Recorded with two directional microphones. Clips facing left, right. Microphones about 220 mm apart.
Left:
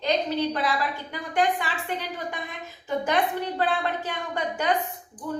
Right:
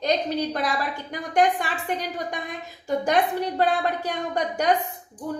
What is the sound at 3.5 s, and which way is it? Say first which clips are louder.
A woman's voice: right 5 dB; 40° right (ahead or behind).